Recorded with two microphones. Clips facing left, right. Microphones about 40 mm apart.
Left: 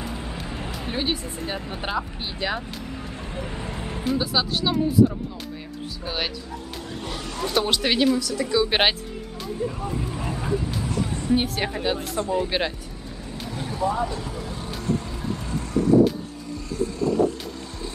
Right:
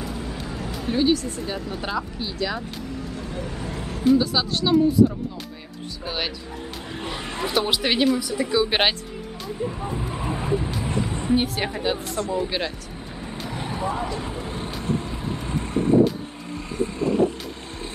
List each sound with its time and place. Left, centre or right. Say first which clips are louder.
0.1 s music: right 1 dB; centre
0.8 s speech: right 7 dB; left
3.3 s a sound: right 1 dB; left
4.0 s speech: right 5 dB; centre
6.0 s speech: even; centre
7.0 s speech: right 2 dB; right
7.5 s speech: even; centre
8.2 s speech: even; centre
8.6 s speech: even; centre
9.8 s vehicle: even; centre
10.8 s a sound: right 1 dB; right
11.3 s speech: even; centre
12.2 s speech: left 1 dB; centre
13.5 s vehicle: left 2 dB; right